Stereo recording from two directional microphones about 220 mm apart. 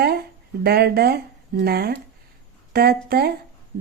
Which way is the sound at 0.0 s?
45° right (ahead or behind).